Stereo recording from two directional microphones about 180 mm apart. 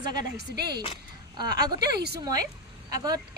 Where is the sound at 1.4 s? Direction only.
20° right (ahead or behind).